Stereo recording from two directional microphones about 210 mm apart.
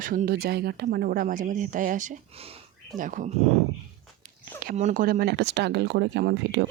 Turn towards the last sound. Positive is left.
turn(degrees=-55)  # may be behind; listen again after turning